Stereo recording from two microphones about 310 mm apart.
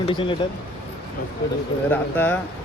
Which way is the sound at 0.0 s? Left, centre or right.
Centre.